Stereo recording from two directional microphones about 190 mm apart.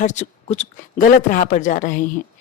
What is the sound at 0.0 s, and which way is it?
Speech, 40° left (ahead or behind).